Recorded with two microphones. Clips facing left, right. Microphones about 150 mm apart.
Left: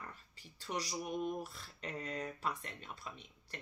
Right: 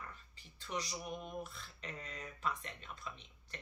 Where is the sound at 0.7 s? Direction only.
45° left (ahead or behind).